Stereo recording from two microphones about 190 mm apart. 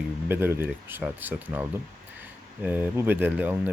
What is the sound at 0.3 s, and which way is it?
Speech, 10° right (ahead or behind).